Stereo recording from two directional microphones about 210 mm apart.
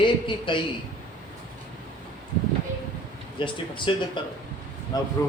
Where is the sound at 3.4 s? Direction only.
25° left (ahead or behind).